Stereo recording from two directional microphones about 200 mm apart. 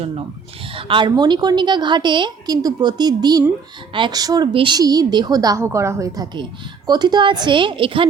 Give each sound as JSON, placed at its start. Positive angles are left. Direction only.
{"t": 0.7, "sound": "a woman's voice", "side_deg": -25}